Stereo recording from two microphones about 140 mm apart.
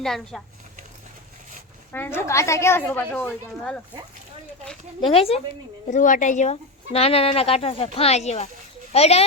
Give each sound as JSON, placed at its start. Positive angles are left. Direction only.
{"t": 0.0, "sound": "speech", "side_deg": 5}
{"t": 1.9, "sound": "a woman's voice", "side_deg": 15}
{"t": 4.9, "sound": "speech", "side_deg": 40}
{"t": 5.9, "sound": "speech", "side_deg": 65}